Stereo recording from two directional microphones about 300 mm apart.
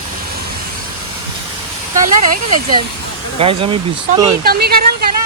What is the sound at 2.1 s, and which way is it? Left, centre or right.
Speech, right.